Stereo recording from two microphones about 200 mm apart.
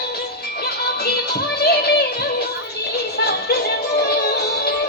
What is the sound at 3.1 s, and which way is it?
Music, 50° left (ahead or behind).